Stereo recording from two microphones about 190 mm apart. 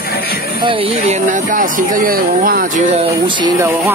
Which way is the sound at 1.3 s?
45° right (ahead or behind).